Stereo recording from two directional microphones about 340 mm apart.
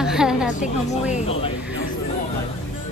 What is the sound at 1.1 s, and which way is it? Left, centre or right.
Speech, centre.